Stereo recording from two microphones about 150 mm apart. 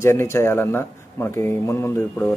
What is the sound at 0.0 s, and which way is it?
Speech, 15° left (ahead or behind).